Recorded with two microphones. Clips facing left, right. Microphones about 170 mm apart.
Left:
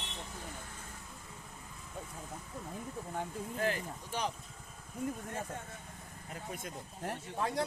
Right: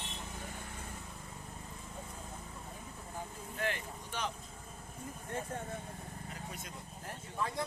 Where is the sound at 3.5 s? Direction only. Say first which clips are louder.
Left 3 dB; 40° left (ahead or behind).